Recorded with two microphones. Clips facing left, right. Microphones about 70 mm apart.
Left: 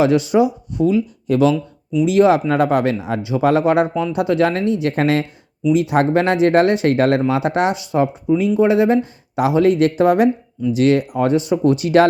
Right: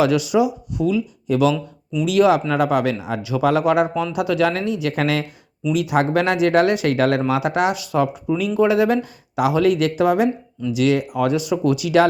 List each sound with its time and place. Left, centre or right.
0.0 s speech: left
10.0 s speech: left